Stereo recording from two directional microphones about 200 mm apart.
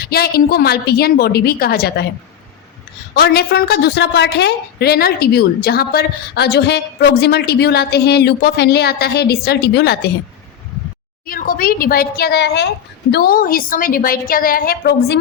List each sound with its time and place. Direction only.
0.0 s a woman's voice: 50° left (ahead or behind)
3.2 s a woman's voice: 50° left (ahead or behind)
11.3 s a woman's voice: 45° left (ahead or behind)